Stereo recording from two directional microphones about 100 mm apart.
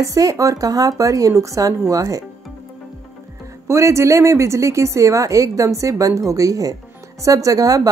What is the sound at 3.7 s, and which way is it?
Speech, 30° right (ahead or behind).